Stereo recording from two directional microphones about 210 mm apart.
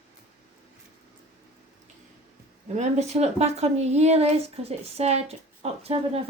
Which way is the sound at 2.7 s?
35° right (ahead or behind).